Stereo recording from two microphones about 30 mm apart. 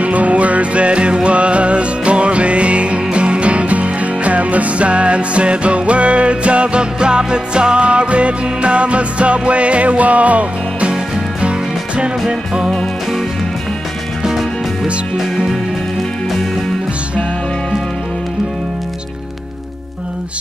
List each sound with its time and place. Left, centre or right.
0.0 s music: right
12.3 s music: right
15.1 s music: centre